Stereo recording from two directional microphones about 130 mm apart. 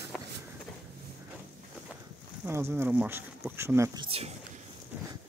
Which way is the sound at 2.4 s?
20° right (ahead or behind).